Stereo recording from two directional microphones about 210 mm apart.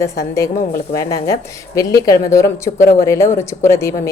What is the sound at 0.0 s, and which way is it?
Speech, 15° left (ahead or behind).